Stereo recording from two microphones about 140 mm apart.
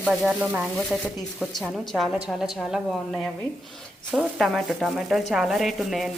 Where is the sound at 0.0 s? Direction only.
5° right (ahead or behind).